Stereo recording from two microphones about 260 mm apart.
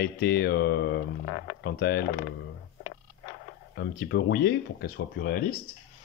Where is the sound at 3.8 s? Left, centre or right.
Left.